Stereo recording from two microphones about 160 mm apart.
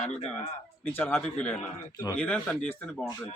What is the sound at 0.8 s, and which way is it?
Speech, 10° left (ahead or behind).